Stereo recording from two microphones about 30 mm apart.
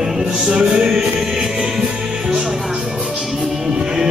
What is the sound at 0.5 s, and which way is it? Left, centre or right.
Music, right.